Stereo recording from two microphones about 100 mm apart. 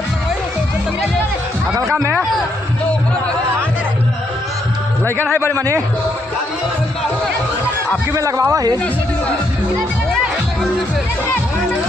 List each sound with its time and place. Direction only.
5.5 s a man's voice: 30° right (ahead or behind)
8.1 s a man's voice: 35° right (ahead or behind)